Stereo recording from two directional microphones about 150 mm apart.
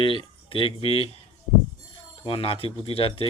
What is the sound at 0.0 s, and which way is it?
Speech, 35° left (ahead or behind).